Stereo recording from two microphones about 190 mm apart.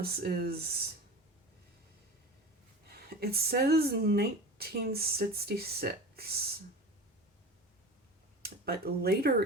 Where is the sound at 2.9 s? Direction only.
55° right (ahead or behind).